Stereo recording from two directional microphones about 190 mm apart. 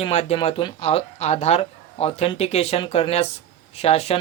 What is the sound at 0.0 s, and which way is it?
Speech, 35° left (ahead or behind).